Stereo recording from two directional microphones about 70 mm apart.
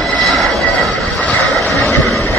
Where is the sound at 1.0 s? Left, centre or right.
Centre.